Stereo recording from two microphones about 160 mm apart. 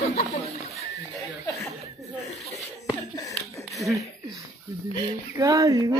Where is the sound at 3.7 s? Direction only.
Centre (ahead or behind).